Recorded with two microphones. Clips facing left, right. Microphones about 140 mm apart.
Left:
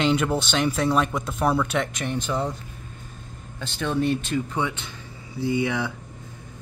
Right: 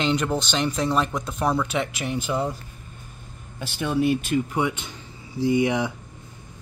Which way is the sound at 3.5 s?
10° right (ahead or behind).